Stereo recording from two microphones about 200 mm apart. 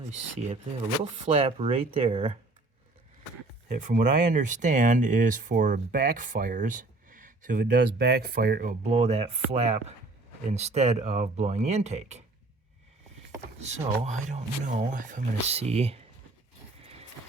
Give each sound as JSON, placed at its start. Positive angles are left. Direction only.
{"t": 1.3, "sound": "speech", "side_deg": -30}
{"t": 3.7, "sound": "speech", "side_deg": -40}
{"t": 8.9, "sound": "speech", "side_deg": -30}
{"t": 13.6, "sound": "speech", "side_deg": -35}